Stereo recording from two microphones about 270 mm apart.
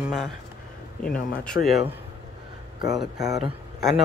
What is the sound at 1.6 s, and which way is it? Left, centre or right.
Speech, left.